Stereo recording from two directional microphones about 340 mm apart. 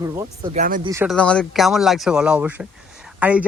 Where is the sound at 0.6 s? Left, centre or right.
Right.